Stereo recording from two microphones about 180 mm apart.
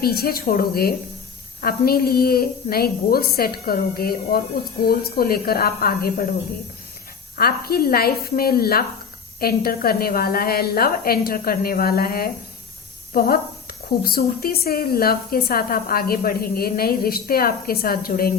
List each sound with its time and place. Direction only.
0.0 s a woman's voice: 60° left (ahead or behind)
7.3 s a woman's voice: 55° left (ahead or behind)